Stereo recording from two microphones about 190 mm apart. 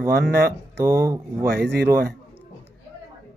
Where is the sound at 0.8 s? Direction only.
15° right (ahead or behind).